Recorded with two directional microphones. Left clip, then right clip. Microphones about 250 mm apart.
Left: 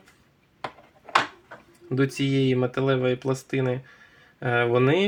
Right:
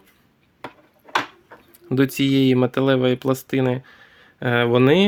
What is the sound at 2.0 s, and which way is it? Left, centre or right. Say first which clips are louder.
Speech: right 5 dB; right.